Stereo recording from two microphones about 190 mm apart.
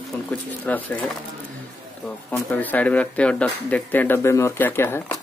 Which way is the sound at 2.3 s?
10° left (ahead or behind).